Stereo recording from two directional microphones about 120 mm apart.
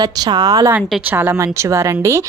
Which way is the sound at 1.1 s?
15° right (ahead or behind).